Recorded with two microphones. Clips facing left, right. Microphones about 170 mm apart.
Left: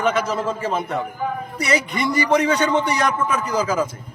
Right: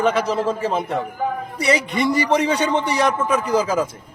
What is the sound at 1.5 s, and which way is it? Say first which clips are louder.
Speech: right 2 dB; 30° right (ahead or behind).